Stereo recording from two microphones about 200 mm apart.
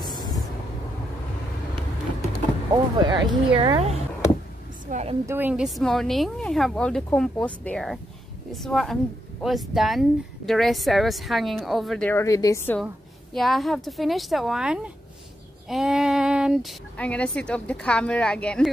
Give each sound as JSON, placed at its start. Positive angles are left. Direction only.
{"t": 2.7, "sound": "a woman's voice", "side_deg": -20}
{"t": 5.2, "sound": "speech", "side_deg": -10}
{"t": 13.3, "sound": "speech", "side_deg": 0}
{"t": 16.9, "sound": "speech", "side_deg": 5}